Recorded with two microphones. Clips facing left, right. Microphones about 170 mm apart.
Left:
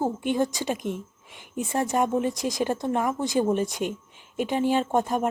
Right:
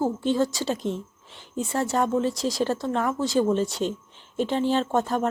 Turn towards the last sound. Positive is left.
turn(degrees=15)  # may be behind; listen again after turning